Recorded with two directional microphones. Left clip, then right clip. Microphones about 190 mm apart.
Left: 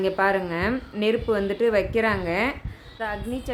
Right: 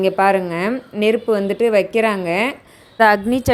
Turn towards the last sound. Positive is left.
turn(degrees=-55)  # may be behind; listen again after turning